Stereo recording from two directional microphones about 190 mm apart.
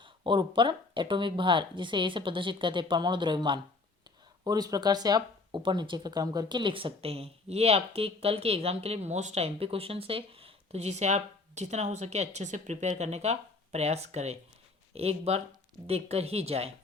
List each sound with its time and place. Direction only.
0.0 s speech: 25° right (ahead or behind)